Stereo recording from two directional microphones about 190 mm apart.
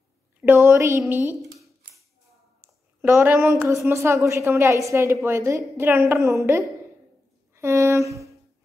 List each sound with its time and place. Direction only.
0.4 s a woman's voice: 10° right (ahead or behind)
3.0 s a woman's voice: 10° right (ahead or behind)
7.5 s a sound: 15° right (ahead or behind)